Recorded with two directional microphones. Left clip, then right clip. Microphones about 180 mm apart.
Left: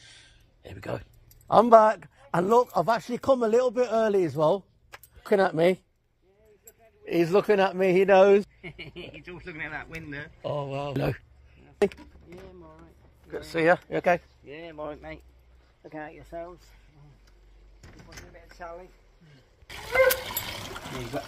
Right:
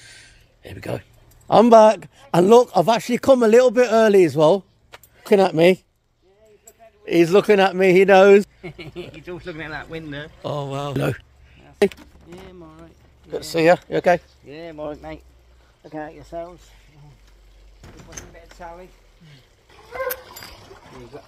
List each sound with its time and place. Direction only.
0.0 s a sound: 15° right (ahead or behind)
1.5 s speech: 45° right (ahead or behind)
5.2 s speech: 25° right (ahead or behind)
7.1 s speech: 10° right (ahead or behind)
12.3 s a sound: 50° right (ahead or behind)
13.5 s speech: 25° right (ahead or behind)
14.4 s speech: 20° right (ahead or behind)
15.0 s speech: centre (ahead or behind)